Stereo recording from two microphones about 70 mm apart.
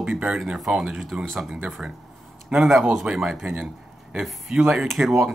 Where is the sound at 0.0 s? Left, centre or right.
Centre.